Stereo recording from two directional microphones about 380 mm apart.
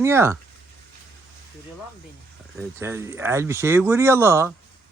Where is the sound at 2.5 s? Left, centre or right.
Centre.